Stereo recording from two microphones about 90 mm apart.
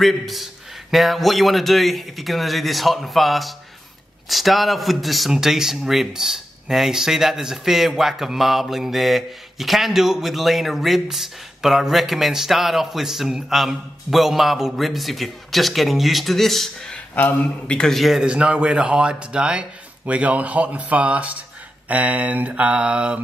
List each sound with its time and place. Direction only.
0.0 s a man's voice: centre (ahead or behind)
17.1 s a man's voice: 20° left (ahead or behind); by 23.2 s 10° right (ahead or behind)